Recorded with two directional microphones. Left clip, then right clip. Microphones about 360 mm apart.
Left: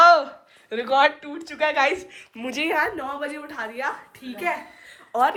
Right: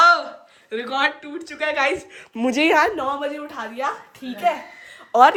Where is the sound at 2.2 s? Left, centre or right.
Right.